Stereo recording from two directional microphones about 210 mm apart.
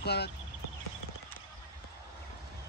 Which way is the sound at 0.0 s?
50° left (ahead or behind).